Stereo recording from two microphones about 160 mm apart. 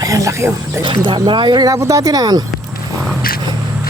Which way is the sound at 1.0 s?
30° right (ahead or behind).